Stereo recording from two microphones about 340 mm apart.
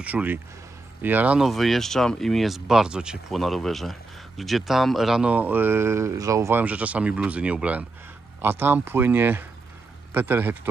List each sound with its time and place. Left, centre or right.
0.0 s speech: centre